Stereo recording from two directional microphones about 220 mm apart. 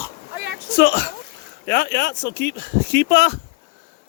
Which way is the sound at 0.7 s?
50° left (ahead or behind).